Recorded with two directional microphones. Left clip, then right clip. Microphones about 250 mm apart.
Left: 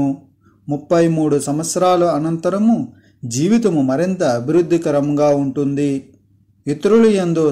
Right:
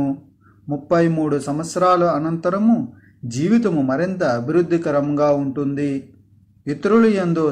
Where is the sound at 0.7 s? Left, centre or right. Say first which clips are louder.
Left 3 dB; left.